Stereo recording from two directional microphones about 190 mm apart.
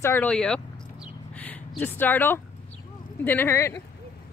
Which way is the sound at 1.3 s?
10° left (ahead or behind).